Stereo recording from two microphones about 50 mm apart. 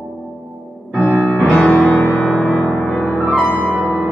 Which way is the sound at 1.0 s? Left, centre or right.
Right.